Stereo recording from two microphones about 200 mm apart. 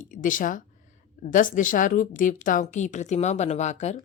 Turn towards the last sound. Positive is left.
turn(degrees=35)  # may be behind; listen again after turning